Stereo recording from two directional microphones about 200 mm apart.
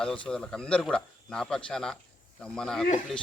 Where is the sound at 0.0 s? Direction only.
5° left (ahead or behind).